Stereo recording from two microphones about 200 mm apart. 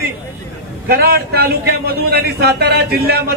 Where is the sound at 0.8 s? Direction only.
50° right (ahead or behind).